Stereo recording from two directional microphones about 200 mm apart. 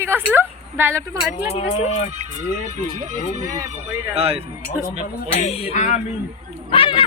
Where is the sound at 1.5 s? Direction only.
35° left (ahead or behind).